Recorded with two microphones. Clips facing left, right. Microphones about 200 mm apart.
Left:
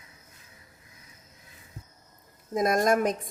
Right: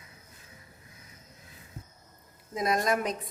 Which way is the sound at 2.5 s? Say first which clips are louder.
Left 4 dB; 45° left (ahead or behind).